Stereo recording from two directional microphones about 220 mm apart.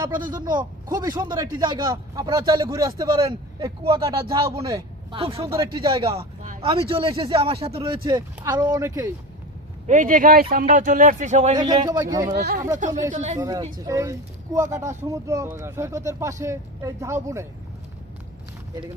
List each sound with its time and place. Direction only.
0.3 s speech: 20° right (ahead or behind)
9.8 s speech: 35° right (ahead or behind)
11.5 s speech: 20° right (ahead or behind)
12.3 s speech: 45° right (ahead or behind)
13.0 s speech: 30° right (ahead or behind)
13.4 s speech: 15° right (ahead or behind)